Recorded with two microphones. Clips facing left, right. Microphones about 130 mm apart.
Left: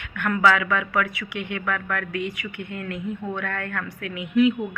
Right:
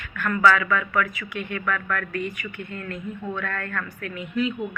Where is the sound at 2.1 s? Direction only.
90° left.